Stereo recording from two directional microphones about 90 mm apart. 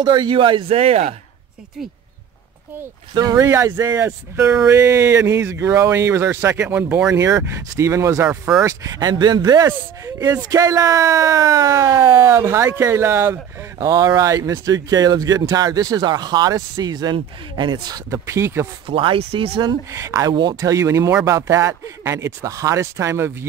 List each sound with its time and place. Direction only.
0.1 s speech: 65° right (ahead or behind)
3.2 s speech: 45° right (ahead or behind); by 7.1 s 15° right (ahead or behind)
7.1 s speech: 35° right (ahead or behind)
8.3 s speech: 5° right (ahead or behind)
8.6 s speech: 40° right (ahead or behind)
9.7 s speech: 35° right (ahead or behind)
13.7 s speech: 45° right (ahead or behind)
18.1 s speech: 35° right (ahead or behind)
18.9 s speech: 85° right
19.9 s speech: 35° right (ahead or behind)